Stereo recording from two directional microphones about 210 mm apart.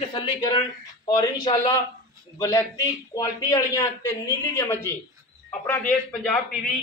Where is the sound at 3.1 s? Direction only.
15° left (ahead or behind).